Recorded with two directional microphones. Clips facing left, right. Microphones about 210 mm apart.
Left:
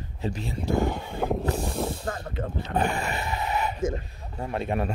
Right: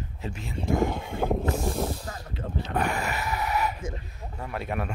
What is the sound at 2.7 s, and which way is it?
A man's voice, 30° left (ahead or behind).